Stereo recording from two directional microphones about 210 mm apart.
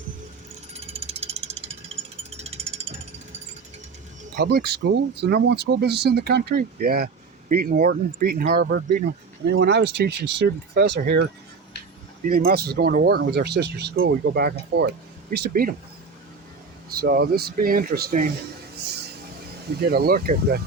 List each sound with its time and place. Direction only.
0.7 s ratchet: 30° right (ahead or behind)
2.3 s mechanisms: 30° right (ahead or behind)
4.4 s speech: 50° right (ahead or behind)
12.3 s speech: 45° right (ahead or behind)
17.0 s speech: 45° right (ahead or behind)
19.8 s speech: 45° right (ahead or behind)